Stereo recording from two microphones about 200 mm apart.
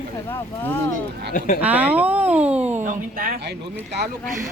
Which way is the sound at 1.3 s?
45° left (ahead or behind).